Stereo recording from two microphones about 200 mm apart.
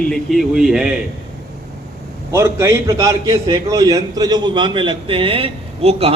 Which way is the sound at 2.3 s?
15° right (ahead or behind).